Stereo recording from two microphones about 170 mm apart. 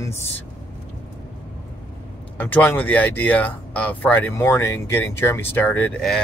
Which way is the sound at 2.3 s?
10° left (ahead or behind).